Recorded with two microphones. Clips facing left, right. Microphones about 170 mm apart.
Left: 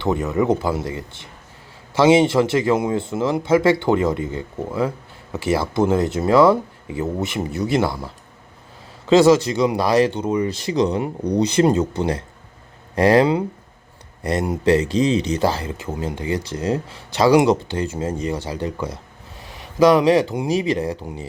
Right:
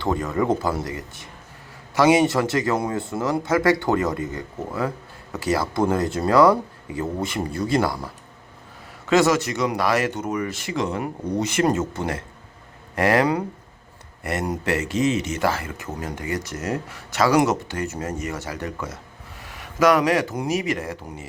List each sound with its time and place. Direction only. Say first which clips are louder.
0.0 s speech: left 3 dB; 20° left (ahead or behind)
9.0 s speech: left 5 dB; 30° left (ahead or behind)
10.9 s speech: left 4 dB; 20° left (ahead or behind)
11.3 s speech: left 6 dB; 35° left (ahead or behind)
11.6 s speech: left 3 dB; 20° left (ahead or behind)
11.9 s speech: left 5 dB; 35° left (ahead or behind)
20.5 s speech: left 5 dB; 30° left (ahead or behind)